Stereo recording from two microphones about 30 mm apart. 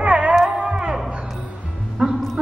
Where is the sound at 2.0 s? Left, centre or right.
Centre.